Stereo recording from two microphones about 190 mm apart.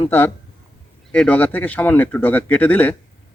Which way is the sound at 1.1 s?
5° left (ahead or behind).